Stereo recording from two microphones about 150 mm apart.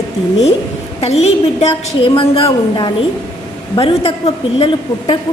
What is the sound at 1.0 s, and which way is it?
A woman's voice, 45° left (ahead or behind).